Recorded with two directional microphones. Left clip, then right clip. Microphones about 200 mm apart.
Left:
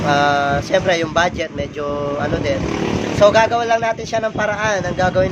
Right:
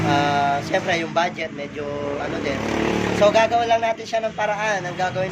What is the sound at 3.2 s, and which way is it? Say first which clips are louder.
Speech: left 4 dB; 55° left (ahead or behind).